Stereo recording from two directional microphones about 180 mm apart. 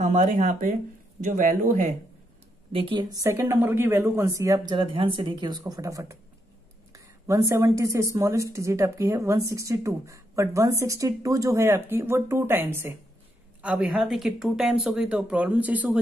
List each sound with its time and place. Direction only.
0.0 s speech: 40° right (ahead or behind)
2.7 s a woman's voice: 30° right (ahead or behind); by 16.0 s 10° right (ahead or behind)